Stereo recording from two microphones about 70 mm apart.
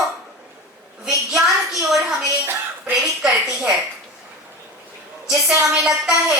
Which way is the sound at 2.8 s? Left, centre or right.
Centre.